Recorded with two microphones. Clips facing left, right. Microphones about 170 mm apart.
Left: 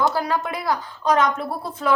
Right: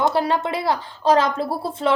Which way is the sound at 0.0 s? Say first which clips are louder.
Right 2 dB; 25° right (ahead or behind).